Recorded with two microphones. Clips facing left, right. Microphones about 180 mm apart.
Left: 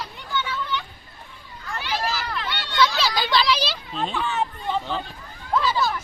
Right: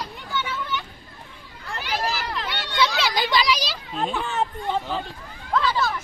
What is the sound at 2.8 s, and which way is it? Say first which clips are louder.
Children playing: left 1 dB; 20° right (ahead or behind).